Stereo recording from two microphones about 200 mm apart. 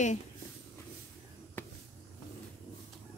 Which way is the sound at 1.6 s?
10° left (ahead or behind).